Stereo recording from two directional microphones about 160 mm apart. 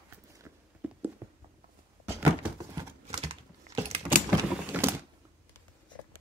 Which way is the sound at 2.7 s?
30° right (ahead or behind).